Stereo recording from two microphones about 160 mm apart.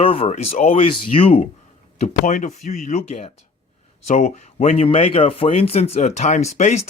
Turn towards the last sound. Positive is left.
turn(degrees=45)  # may be behind; listen again after turning